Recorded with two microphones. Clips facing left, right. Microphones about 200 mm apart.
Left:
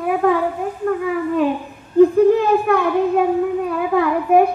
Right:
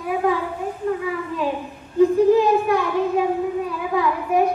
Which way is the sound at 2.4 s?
55° left (ahead or behind).